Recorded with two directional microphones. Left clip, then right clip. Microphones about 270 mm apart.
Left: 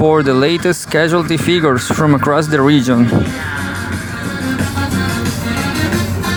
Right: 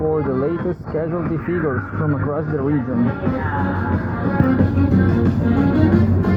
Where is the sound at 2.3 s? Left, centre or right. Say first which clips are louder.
Left 10 dB; left.